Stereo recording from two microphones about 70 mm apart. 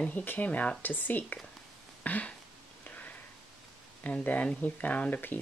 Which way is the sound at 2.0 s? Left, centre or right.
Left.